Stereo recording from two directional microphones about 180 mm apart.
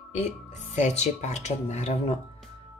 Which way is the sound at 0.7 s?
40° left (ahead or behind).